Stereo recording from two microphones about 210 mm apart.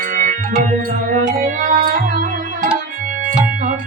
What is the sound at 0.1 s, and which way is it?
Music, 35° right (ahead or behind).